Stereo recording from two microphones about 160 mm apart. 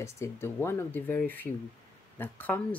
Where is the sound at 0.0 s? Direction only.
15° left (ahead or behind).